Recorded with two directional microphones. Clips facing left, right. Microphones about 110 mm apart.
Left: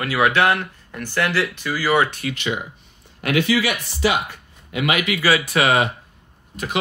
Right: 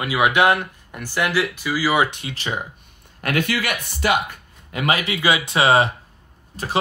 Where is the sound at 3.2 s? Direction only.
50° right (ahead or behind).